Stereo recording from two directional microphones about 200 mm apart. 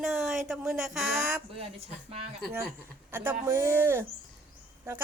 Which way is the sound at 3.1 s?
10° right (ahead or behind).